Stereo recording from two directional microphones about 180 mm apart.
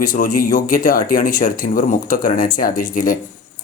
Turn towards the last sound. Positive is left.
turn(degrees=50)  # may be behind; listen again after turning